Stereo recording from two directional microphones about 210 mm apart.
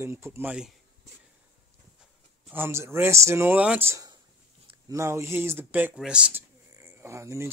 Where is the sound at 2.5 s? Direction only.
10° right (ahead or behind).